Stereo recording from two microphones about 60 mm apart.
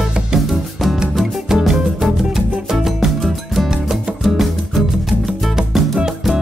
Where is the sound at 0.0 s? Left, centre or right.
Centre.